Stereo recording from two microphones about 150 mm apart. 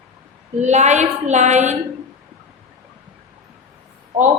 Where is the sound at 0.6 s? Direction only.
50° right (ahead or behind).